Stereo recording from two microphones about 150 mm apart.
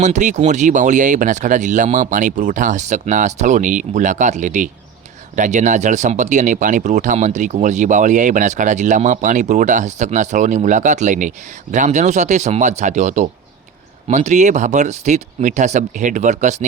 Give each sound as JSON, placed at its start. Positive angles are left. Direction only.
{"t": 0.0, "sound": "speech", "side_deg": -55}